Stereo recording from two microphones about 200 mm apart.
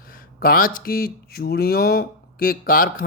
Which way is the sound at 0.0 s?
45° left (ahead or behind).